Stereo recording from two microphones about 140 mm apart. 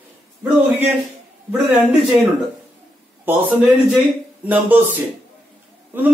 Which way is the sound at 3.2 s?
15° right (ahead or behind).